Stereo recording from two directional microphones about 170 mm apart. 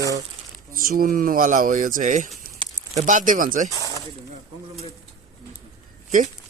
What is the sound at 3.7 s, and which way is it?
Speech, 20° left (ahead or behind).